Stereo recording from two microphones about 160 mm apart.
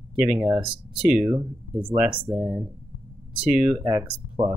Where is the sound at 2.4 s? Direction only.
35° right (ahead or behind).